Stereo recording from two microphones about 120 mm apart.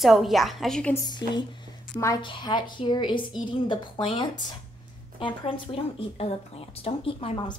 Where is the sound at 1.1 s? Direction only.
40° left (ahead or behind).